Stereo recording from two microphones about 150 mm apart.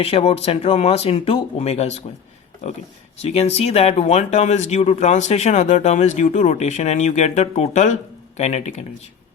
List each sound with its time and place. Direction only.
0.0 s speech: 40° left (ahead or behind)
3.2 s speech: 45° left (ahead or behind)